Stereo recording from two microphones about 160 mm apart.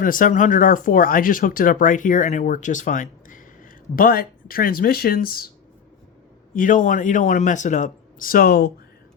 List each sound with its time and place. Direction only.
0.0 s speech: 60° left (ahead or behind)
6.5 s a man's voice: 55° left (ahead or behind); by 8.7 s 85° left